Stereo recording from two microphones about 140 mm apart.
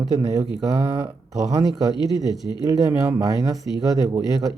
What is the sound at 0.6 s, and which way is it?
Speech, 25° right (ahead or behind).